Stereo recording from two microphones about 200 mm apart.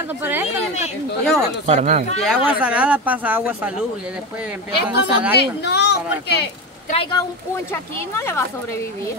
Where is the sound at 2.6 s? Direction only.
5° right (ahead or behind).